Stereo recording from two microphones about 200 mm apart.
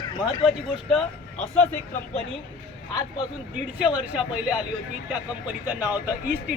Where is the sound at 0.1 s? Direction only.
20° left (ahead or behind).